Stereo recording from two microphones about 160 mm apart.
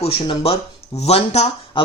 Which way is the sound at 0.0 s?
35° left (ahead or behind).